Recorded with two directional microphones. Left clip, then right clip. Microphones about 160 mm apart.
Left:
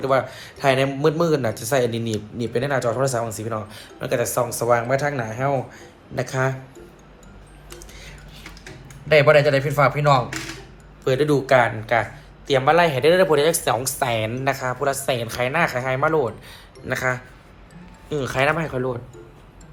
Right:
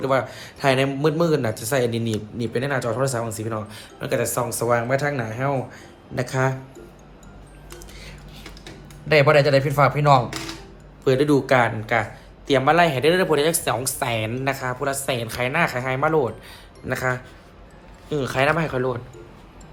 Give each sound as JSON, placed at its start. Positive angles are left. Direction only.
{"t": 0.0, "sound": "speech", "side_deg": -20}
{"t": 9.0, "sound": "a man's voice", "side_deg": -20}